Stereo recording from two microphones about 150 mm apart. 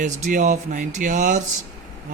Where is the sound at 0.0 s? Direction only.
60° right (ahead or behind).